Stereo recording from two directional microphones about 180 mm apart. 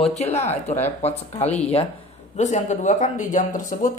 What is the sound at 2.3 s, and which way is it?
Speech, 40° left (ahead or behind).